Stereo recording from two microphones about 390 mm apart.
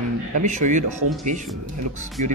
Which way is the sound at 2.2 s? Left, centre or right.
Right.